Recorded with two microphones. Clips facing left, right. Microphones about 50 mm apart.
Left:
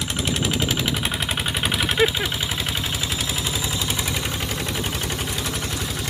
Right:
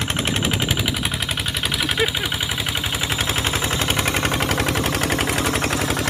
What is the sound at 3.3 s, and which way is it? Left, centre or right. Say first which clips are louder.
Gunshot: right 4 dB; right.